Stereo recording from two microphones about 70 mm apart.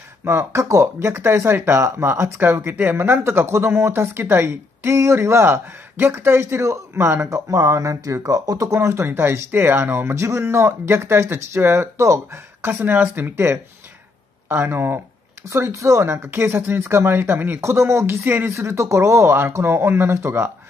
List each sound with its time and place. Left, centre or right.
0.2 s speech: right
8.7 s speech: right
12.6 s speech: right